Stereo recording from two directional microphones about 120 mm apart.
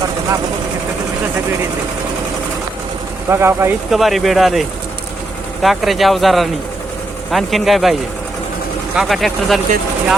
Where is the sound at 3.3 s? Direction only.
20° right (ahead or behind).